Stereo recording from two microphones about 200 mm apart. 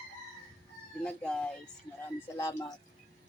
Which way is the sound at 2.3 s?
15° left (ahead or behind).